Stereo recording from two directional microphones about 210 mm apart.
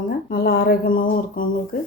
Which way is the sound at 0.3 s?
45° left (ahead or behind).